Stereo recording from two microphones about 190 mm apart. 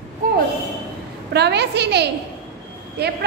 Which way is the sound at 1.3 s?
60° right (ahead or behind).